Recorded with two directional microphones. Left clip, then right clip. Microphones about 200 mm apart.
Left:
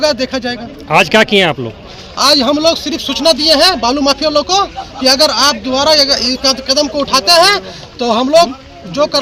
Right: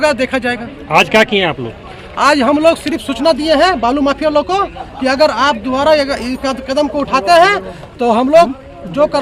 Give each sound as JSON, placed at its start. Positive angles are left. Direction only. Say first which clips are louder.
{"t": 0.0, "sound": "speech", "louder": "right 1 dB", "side_deg": 0}
{"t": 0.9, "sound": "a man's voice", "louder": "left 1 dB", "side_deg": 40}
{"t": 2.1, "sound": "speech", "louder": "even", "side_deg": 0}